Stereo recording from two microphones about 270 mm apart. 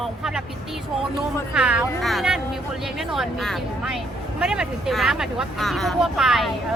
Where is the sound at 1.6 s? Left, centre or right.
Centre.